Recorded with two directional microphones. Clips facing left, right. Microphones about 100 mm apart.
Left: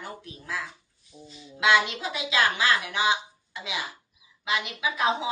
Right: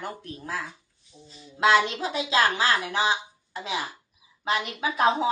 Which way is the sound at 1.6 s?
35° right (ahead or behind).